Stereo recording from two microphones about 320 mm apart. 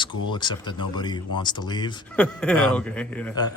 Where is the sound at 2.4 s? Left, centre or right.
Centre.